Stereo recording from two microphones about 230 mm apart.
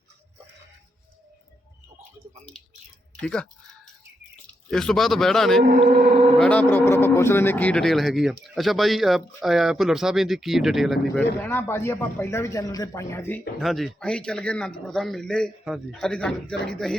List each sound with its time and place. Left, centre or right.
3.2 s speech: centre
4.7 s speech: centre
5.8 s speech: right
6.4 s speech: centre